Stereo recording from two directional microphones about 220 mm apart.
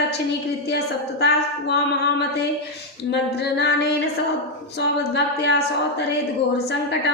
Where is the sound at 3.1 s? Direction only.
50° left (ahead or behind).